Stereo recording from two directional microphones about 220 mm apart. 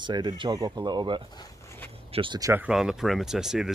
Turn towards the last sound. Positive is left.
turn(degrees=0)  # may be behind; listen again after turning